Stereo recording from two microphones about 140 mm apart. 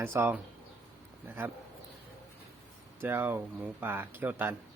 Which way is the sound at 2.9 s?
15° right (ahead or behind).